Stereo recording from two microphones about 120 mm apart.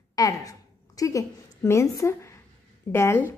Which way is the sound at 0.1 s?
30° left (ahead or behind).